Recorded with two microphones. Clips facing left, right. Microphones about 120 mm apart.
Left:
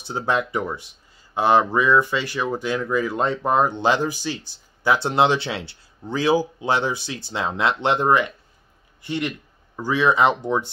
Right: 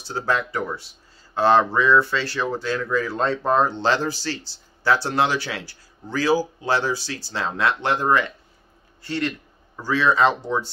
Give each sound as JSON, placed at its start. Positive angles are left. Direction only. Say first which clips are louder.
{"t": 0.0, "sound": "a man's voice", "louder": "left 1 dB", "side_deg": 20}